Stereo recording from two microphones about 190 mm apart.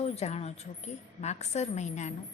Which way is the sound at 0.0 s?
35° left (ahead or behind).